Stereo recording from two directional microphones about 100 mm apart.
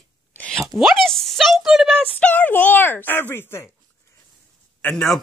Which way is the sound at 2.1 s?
15° left (ahead or behind).